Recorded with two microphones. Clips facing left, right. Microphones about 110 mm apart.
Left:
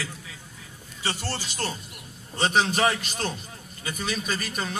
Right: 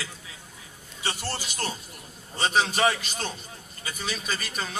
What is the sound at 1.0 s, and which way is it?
Speech, 10° right (ahead or behind).